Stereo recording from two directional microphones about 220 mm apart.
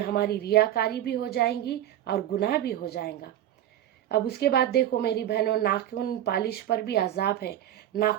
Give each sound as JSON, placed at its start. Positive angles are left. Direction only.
{"t": 0.0, "sound": "a woman's voice", "side_deg": 45}